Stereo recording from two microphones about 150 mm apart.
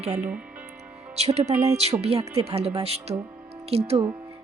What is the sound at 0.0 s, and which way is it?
Speech, 45° right (ahead or behind).